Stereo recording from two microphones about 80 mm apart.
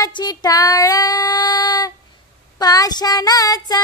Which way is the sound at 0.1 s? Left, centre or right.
Left.